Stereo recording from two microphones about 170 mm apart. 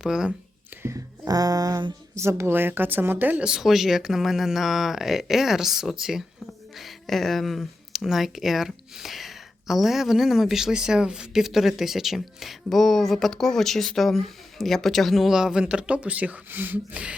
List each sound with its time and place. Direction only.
0.0 s speech: 5° right (ahead or behind)
0.8 s speech: 15° right (ahead or behind)